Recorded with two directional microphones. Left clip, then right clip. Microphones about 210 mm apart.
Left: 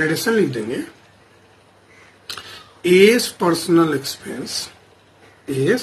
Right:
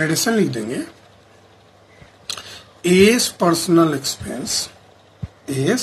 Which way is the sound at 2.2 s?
30° right (ahead or behind).